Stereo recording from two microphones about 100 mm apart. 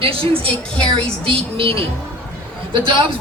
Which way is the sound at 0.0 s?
70° right (ahead or behind).